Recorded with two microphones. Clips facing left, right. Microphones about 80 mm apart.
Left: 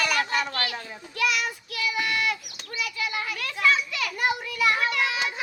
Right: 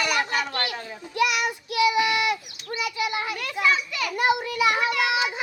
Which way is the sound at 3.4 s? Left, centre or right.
Centre.